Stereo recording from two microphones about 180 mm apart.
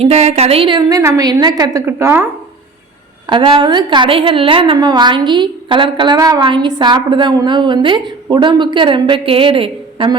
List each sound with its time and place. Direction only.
0.0 s a woman's voice: 35° right (ahead or behind); by 2.2 s 15° right (ahead or behind)
3.2 s a woman's voice: 25° right (ahead or behind)